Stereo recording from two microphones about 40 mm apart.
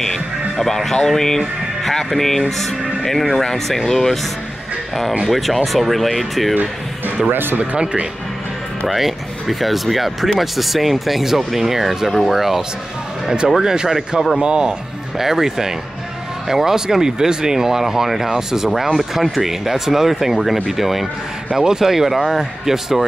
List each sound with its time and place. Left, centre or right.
0.6 s speech: centre
5.3 s speech: centre
7.2 s speech: right
7.7 s speech: right
8.8 s speech: centre; by 14.8 s right
15.1 s speech: centre